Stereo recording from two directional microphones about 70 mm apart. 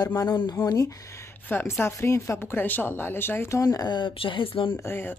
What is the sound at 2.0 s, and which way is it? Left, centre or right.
Speech, left.